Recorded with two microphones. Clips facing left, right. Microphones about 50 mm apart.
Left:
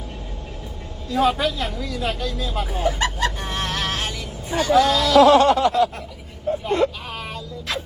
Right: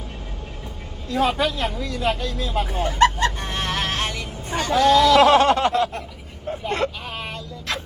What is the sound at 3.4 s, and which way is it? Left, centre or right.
Music, right.